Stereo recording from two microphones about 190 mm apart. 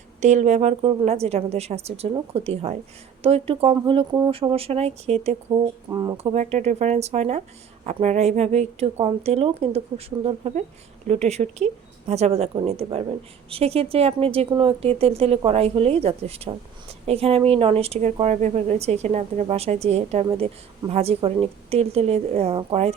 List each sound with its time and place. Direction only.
0.2 s a woman's voice: 40° right (ahead or behind)
5.9 s speech: 20° right (ahead or behind)
6.3 s a woman's voice: 35° right (ahead or behind)